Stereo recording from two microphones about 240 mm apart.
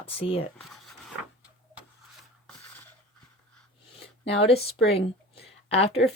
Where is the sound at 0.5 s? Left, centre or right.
Centre.